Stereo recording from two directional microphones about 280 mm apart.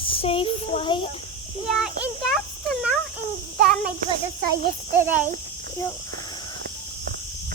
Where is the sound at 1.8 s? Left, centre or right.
Centre.